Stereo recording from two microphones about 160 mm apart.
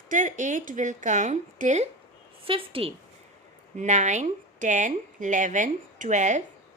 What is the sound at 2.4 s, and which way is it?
Speech, 35° right (ahead or behind).